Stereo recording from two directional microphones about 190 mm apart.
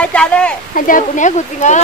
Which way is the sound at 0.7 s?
45° left (ahead or behind).